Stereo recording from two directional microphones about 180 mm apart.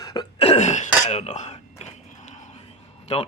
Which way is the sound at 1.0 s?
35° left (ahead or behind).